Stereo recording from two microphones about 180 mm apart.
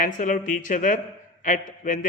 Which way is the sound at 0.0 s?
45° left (ahead or behind).